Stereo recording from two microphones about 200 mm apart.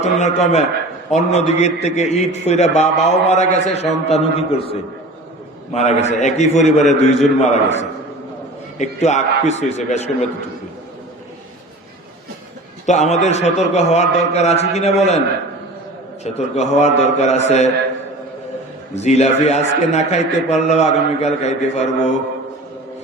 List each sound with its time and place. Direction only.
0.0 s a man's voice: 35° left (ahead or behind)
12.8 s a man's voice: 35° left (ahead or behind)
16.2 s a man's voice: 35° left (ahead or behind)
18.9 s a man's voice: 35° left (ahead or behind)